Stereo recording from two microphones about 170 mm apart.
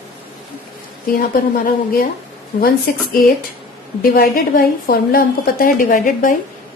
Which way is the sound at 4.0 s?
60° left (ahead or behind).